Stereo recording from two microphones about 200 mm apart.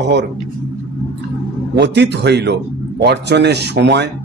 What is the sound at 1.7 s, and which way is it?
A man's voice, 60° right (ahead or behind).